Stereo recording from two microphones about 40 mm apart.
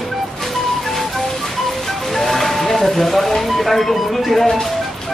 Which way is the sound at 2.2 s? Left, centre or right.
Centre.